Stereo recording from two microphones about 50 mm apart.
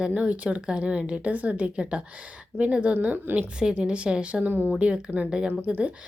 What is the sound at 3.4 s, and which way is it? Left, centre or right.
Speech, right.